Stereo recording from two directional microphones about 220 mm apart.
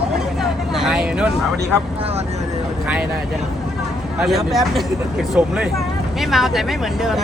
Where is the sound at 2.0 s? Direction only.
25° right (ahead or behind).